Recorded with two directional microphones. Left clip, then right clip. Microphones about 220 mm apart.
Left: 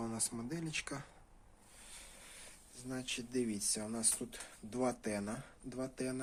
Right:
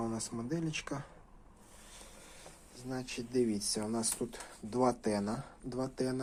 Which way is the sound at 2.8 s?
15° left (ahead or behind).